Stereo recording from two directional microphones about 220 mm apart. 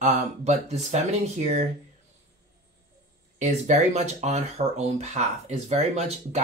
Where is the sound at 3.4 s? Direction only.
35° right (ahead or behind).